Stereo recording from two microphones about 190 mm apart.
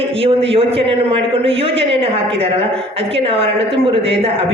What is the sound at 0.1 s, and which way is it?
A woman's voice, 30° right (ahead or behind).